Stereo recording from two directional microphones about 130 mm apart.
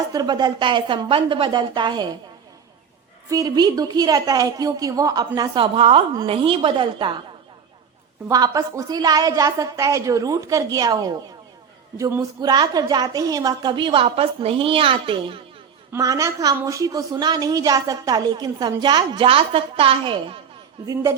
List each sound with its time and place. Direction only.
0.1 s a woman's voice: 30° right (ahead or behind)
3.2 s a woman's voice: 25° right (ahead or behind)
8.3 s a woman's voice: 25° right (ahead or behind)
12.4 s a woman's voice: 30° right (ahead or behind)
15.9 s a woman's voice: 25° right (ahead or behind); by 20.4 s 45° right (ahead or behind)
20.8 s a woman's voice: 25° right (ahead or behind)